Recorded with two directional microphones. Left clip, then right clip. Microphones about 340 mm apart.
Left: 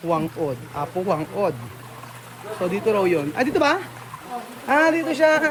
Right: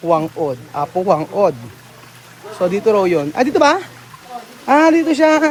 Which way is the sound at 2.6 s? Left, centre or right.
Centre.